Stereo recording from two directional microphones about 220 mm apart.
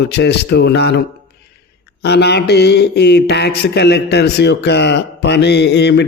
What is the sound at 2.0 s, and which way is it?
A man's voice, 50° left (ahead or behind).